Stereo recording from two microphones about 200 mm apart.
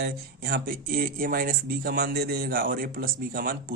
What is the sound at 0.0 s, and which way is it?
Speech, 50° right (ahead or behind).